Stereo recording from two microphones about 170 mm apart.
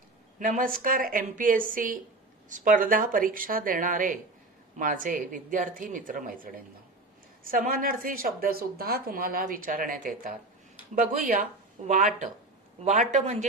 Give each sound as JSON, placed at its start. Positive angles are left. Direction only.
{"t": 0.3, "sound": "speech", "side_deg": -50}